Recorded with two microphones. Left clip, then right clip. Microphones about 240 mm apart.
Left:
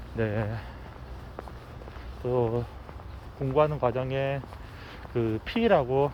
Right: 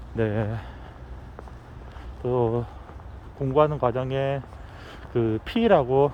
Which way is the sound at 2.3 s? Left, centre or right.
Right.